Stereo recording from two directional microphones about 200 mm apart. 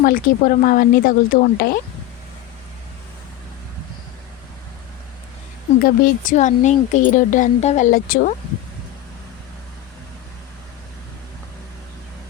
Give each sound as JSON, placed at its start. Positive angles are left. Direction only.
{"t": 0.0, "sound": "speech", "side_deg": 45}
{"t": 5.8, "sound": "speech", "side_deg": 40}